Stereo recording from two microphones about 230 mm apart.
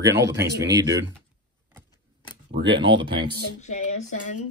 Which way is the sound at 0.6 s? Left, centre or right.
Centre.